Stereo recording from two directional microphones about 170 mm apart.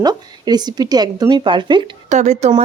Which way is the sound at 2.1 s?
45° right (ahead or behind).